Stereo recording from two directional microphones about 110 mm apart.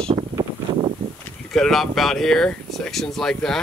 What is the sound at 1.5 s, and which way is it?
Speech, centre (ahead or behind).